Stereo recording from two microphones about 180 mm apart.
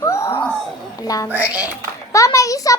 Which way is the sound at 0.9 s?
20° left (ahead or behind).